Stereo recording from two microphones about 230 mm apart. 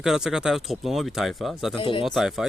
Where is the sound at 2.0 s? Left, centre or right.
Centre.